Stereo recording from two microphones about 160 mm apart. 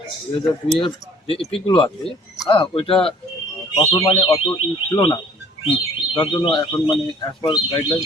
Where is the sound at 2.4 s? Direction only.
30° left (ahead or behind).